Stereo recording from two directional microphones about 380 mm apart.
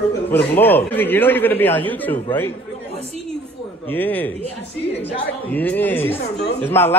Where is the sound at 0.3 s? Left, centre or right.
Centre.